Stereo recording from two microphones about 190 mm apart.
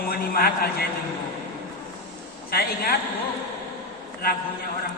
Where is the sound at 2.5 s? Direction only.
55° left (ahead or behind).